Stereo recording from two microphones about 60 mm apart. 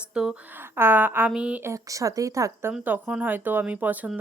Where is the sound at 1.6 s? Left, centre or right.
Right.